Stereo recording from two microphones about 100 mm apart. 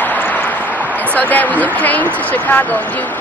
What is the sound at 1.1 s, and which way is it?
Speech, 15° left (ahead or behind).